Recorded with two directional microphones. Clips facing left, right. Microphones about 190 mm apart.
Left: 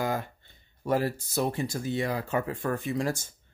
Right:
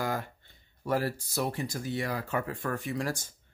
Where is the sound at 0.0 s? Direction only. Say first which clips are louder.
Left 3 dB; 20° left (ahead or behind).